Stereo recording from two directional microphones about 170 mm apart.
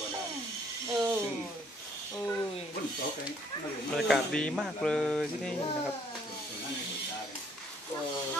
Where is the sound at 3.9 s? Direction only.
Centre (ahead or behind).